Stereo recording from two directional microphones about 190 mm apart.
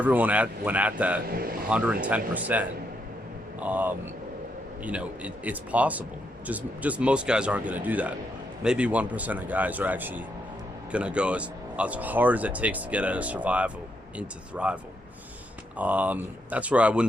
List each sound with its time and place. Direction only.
0.0 s speech: 10° right (ahead or behind)
1.3 s speech: 50° right (ahead or behind)
1.7 s speech: 5° right (ahead or behind)
15.8 s speech: 10° right (ahead or behind)